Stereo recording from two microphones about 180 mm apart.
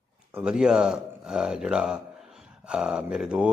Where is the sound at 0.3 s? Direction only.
5° right (ahead or behind).